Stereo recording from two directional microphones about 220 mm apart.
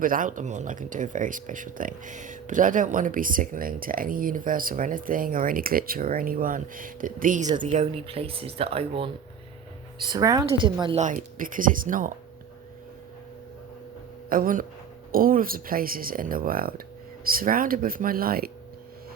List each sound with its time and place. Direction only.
0.0 s speech: 40° right (ahead or behind); by 11.0 s 20° right (ahead or behind)
11.0 s speech: 35° right (ahead or behind)
14.3 s speech: 40° right (ahead or behind)